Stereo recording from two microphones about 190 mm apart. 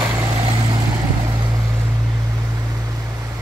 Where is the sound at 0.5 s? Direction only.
25° right (ahead or behind).